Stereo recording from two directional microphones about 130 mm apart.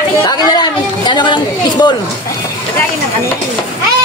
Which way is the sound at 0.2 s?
35° left (ahead or behind).